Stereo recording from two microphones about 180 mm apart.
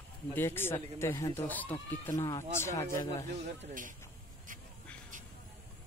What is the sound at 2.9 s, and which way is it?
Speech, 40° right (ahead or behind).